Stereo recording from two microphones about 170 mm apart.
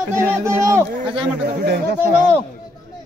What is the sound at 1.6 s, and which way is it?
Speech, 75° right (ahead or behind).